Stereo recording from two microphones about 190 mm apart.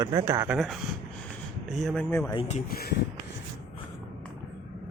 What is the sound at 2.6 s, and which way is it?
Speech, 55° left (ahead or behind).